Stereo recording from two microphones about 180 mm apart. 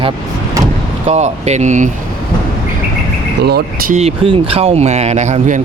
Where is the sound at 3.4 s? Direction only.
65° right (ahead or behind).